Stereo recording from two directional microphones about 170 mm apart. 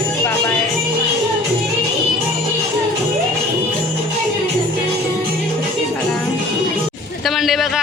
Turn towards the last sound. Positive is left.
turn(degrees=0)  # may be behind; listen again after turning